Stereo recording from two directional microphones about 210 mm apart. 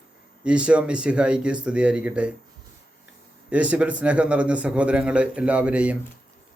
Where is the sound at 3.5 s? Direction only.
5° right (ahead or behind).